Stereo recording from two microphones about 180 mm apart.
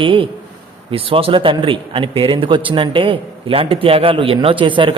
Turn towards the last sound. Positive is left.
turn(degrees=-30)  # may be behind; listen again after turning